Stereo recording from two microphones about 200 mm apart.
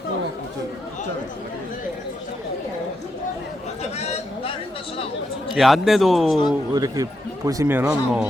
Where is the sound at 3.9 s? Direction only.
30° left (ahead or behind).